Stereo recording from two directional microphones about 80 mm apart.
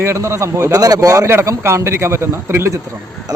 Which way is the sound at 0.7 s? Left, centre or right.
Right.